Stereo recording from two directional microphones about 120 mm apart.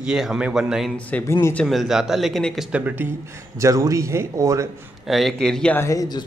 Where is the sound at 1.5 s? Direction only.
5° left (ahead or behind).